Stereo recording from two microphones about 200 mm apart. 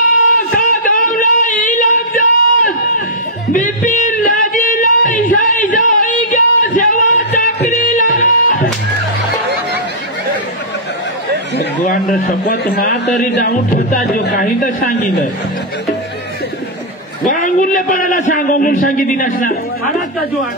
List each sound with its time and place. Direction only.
0.6 s a sound: 40° left (ahead or behind)
3.5 s music: 40° left (ahead or behind)
11.8 s a man's voice: 45° left (ahead or behind)
14.3 s a man's voice: 40° left (ahead or behind)
17.2 s a man's voice: 40° left (ahead or behind)